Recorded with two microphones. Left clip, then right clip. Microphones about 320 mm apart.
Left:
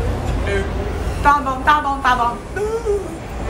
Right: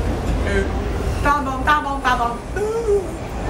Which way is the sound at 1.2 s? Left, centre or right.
Centre.